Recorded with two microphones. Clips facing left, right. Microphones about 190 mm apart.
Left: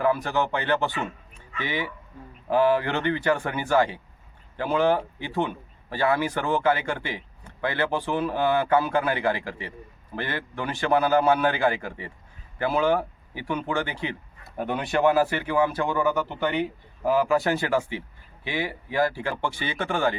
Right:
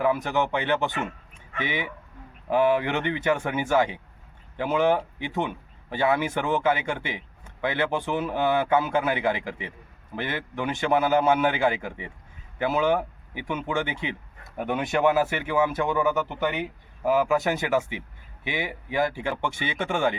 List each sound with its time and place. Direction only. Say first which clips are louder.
0.0 s speech: even; 20° right (ahead or behind)